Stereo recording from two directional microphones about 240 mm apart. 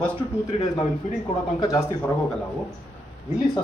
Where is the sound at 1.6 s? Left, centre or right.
Centre.